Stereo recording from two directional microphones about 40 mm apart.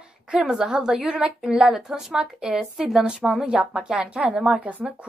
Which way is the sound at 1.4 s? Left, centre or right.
Centre.